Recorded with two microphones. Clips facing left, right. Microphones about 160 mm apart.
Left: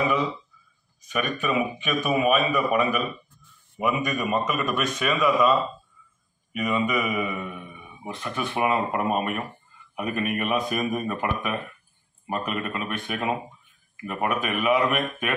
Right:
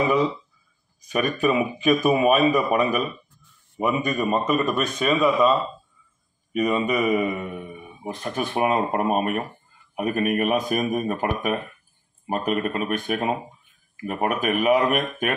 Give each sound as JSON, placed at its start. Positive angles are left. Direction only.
{"t": 1.0, "sound": "a man's voice", "side_deg": -35}